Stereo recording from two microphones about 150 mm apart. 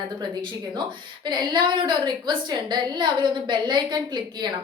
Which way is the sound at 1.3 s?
30° right (ahead or behind).